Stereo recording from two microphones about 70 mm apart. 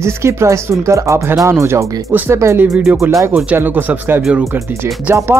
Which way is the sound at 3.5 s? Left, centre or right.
Right.